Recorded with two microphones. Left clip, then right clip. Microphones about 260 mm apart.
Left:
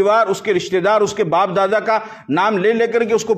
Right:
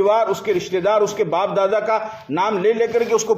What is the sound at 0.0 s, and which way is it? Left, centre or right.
A man's voice, left.